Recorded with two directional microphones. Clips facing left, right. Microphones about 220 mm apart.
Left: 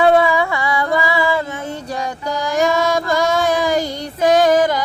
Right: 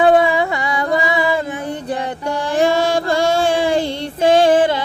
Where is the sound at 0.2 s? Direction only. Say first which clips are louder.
Even; 20° right (ahead or behind).